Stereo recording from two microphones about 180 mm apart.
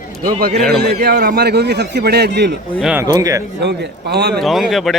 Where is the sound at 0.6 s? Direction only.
65° right (ahead or behind).